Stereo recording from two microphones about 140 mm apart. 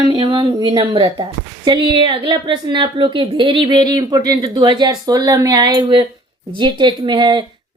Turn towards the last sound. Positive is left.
turn(degrees=-30)  # may be behind; listen again after turning